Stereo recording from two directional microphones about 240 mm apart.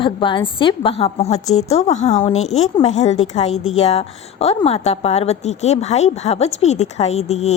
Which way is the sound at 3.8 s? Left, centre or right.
Left.